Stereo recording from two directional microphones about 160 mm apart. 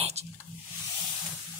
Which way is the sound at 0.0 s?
40° right (ahead or behind).